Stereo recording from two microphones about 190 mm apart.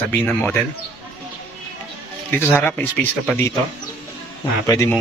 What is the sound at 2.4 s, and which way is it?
Speech, 10° left (ahead or behind).